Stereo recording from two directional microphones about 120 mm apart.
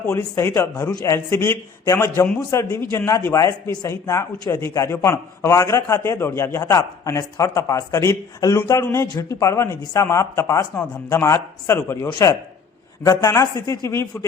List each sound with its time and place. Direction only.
0.0 s a man's voice: 25° left (ahead or behind)